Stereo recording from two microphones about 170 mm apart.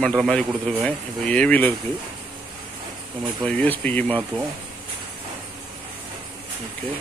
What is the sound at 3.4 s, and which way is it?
Speech, 10° left (ahead or behind).